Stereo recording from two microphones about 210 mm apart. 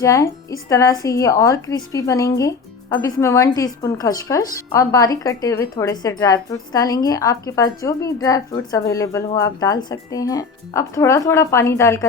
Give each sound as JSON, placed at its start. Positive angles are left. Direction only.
{"t": 0.0, "sound": "a woman's voice", "side_deg": 15}